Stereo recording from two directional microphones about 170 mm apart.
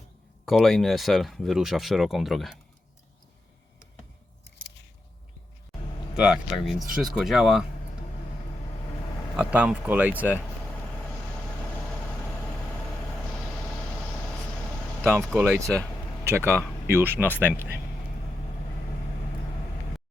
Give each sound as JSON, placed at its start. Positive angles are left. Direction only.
{"t": 0.4, "sound": "speech", "side_deg": 0}
{"t": 6.1, "sound": "speech", "side_deg": -5}
{"t": 9.3, "sound": "speech", "side_deg": -5}
{"t": 15.2, "sound": "speech", "side_deg": 0}
{"t": 15.4, "sound": "speech", "side_deg": -15}